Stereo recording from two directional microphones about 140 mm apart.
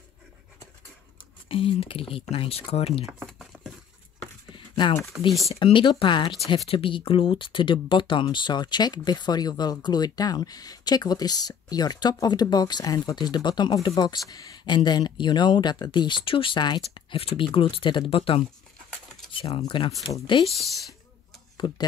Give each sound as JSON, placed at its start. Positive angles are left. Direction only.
{"t": 1.5, "sound": "speech", "side_deg": 40}
{"t": 3.1, "sound": "speech", "side_deg": -10}
{"t": 5.5, "sound": "speech", "side_deg": 35}
{"t": 20.4, "sound": "speech", "side_deg": 0}
{"t": 21.5, "sound": "speech", "side_deg": 30}